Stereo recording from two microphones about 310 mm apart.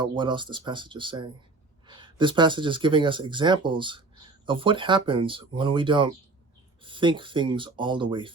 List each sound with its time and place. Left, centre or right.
0.0 s speech: centre